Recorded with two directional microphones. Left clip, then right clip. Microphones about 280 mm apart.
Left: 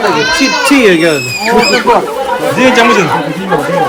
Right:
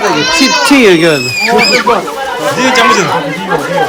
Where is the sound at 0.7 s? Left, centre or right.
Right.